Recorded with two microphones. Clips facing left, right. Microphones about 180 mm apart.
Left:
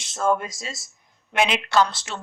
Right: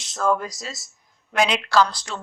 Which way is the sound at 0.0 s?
Centre (ahead or behind).